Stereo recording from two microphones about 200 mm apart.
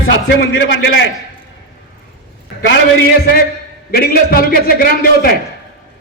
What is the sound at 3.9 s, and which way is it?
Speech, 50° left (ahead or behind).